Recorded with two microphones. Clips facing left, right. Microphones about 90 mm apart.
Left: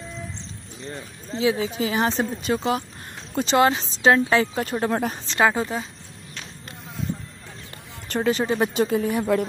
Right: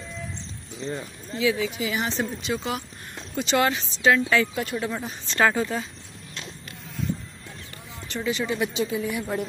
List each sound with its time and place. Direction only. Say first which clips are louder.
0.7 s speech: right 4 dB; 20° right (ahead or behind)
1.3 s speech: left 2 dB; 30° left (ahead or behind)
5.4 s speech: left 1 dB; 20° left (ahead or behind)
8.1 s speech: left 5 dB; 45° left (ahead or behind)